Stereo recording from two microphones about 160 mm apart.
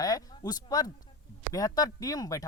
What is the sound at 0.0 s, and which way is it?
Speech, 25° left (ahead or behind).